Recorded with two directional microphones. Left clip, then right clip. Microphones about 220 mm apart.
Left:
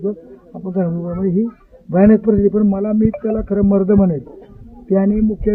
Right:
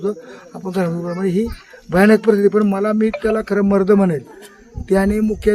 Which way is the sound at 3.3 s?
30° right (ahead or behind).